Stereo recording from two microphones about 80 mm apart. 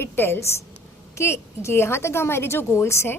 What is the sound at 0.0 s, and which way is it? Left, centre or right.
A woman's voice, left.